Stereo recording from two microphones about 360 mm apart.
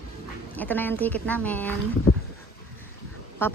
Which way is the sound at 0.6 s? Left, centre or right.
Centre.